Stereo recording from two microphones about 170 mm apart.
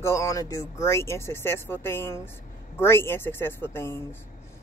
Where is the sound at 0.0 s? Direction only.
15° left (ahead or behind).